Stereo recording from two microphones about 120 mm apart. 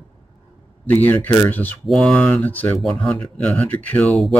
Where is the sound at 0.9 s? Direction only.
15° left (ahead or behind).